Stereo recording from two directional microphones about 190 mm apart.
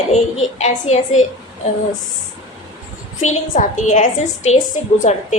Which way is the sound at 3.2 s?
35° left (ahead or behind).